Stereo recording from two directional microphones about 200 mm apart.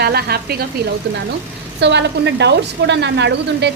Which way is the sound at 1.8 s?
60° right (ahead or behind).